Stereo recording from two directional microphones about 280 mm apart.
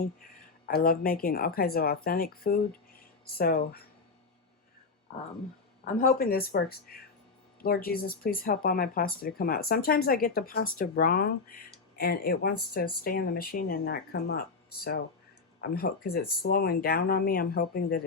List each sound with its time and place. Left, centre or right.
0.7 s speech: left
5.8 s speech: left
15.6 s speech: left